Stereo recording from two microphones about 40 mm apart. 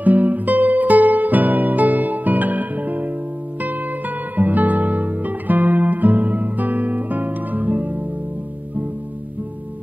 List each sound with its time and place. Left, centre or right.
0.0 s music: right
4.4 s music: right